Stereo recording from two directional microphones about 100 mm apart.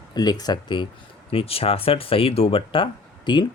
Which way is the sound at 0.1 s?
40° left (ahead or behind).